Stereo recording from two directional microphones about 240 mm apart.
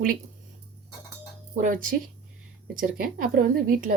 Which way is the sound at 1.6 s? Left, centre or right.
Right.